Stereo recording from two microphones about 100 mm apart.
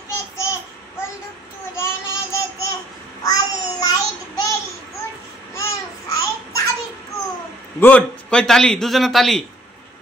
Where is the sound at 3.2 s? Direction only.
40° left (ahead or behind).